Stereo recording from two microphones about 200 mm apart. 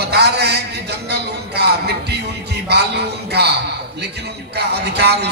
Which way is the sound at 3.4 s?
55° right (ahead or behind).